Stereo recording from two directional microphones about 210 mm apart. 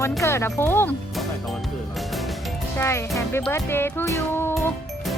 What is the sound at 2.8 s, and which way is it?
Speech, 10° left (ahead or behind).